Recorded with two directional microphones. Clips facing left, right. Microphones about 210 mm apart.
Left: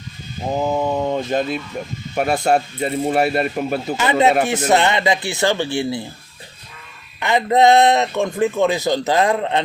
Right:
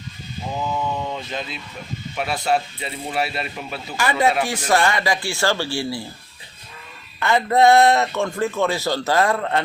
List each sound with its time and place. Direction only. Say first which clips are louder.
0.5 s speech: left 6 dB; 40° left (ahead or behind)
3.9 s a man's voice: left 3 dB; 20° left (ahead or behind)
7.2 s a man's voice: left 2 dB; 20° left (ahead or behind)